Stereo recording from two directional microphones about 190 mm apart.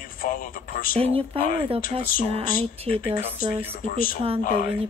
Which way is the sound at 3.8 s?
45° left (ahead or behind).